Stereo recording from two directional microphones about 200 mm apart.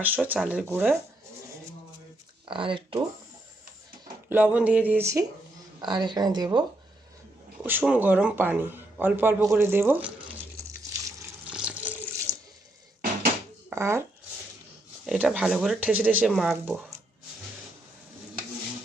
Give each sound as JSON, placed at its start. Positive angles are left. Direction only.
{"t": 0.0, "sound": "speech", "side_deg": -10}
{"t": 2.5, "sound": "a woman's voice", "side_deg": -25}
{"t": 4.3, "sound": "a woman's voice", "side_deg": -10}
{"t": 7.6, "sound": "speech", "side_deg": -10}
{"t": 10.8, "sound": "water", "side_deg": -15}
{"t": 11.4, "sound": "water", "side_deg": -5}
{"t": 13.7, "sound": "shuffling cards", "side_deg": -15}
{"t": 15.0, "sound": "speech", "side_deg": 0}